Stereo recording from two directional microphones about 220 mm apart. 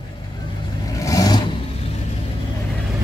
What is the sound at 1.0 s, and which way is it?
Vehicle, 15° left (ahead or behind).